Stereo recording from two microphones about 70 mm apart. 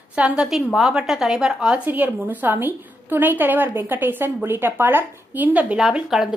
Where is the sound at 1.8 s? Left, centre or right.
Right.